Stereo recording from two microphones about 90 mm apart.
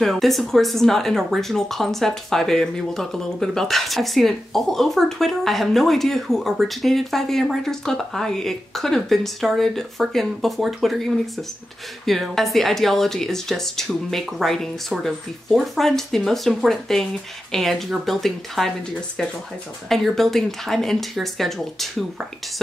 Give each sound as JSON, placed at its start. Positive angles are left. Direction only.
{"t": 0.0, "sound": "speech", "side_deg": 0}
{"t": 12.1, "sound": "speech", "side_deg": 0}
{"t": 19.9, "sound": "speech", "side_deg": 0}